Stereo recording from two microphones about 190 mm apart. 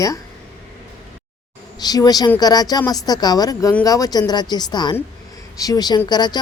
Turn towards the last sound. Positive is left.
turn(degrees=20)  # may be behind; listen again after turning